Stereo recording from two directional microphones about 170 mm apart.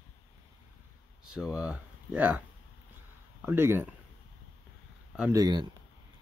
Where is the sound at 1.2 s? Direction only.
5° right (ahead or behind).